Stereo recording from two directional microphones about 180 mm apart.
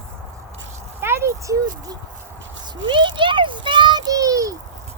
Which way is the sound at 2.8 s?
25° right (ahead or behind).